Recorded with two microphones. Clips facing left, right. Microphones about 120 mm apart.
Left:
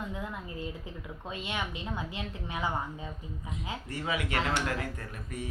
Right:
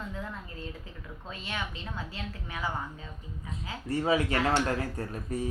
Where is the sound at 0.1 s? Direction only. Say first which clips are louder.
Left 1 dB; 15° left (ahead or behind).